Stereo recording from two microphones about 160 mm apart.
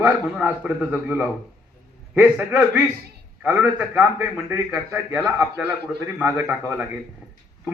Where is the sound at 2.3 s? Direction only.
5° right (ahead or behind).